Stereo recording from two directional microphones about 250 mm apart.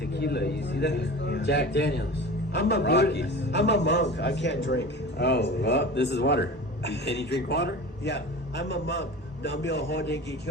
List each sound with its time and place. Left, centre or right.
0.0 s a man's voice: left